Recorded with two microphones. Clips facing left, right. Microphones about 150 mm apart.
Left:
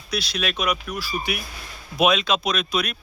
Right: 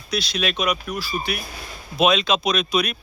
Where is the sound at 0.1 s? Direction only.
5° left (ahead or behind).